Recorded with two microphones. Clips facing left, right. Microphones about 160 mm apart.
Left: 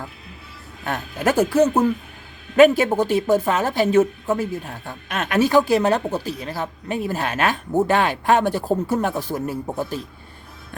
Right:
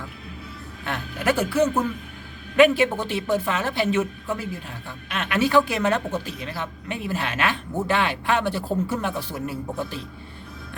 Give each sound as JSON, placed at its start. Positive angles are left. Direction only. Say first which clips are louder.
{"t": 0.9, "sound": "speech", "louder": "left 3 dB", "side_deg": 45}